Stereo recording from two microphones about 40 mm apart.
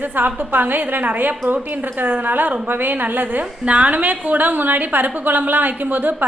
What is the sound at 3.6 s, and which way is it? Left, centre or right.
A woman's voice, right.